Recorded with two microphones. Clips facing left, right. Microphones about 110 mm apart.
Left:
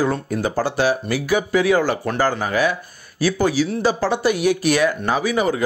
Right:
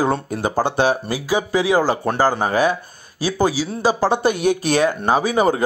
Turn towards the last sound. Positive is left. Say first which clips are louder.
# right 3 dB
turn(degrees=-30)  # may be behind; listen again after turning